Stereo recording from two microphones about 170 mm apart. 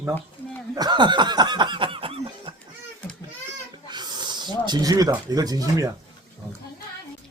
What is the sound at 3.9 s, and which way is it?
Speech, 25° right (ahead or behind).